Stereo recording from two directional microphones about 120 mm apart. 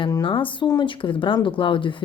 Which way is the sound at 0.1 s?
45° left (ahead or behind).